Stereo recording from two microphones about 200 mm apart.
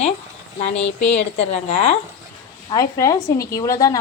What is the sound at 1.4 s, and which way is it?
Speech, 35° left (ahead or behind).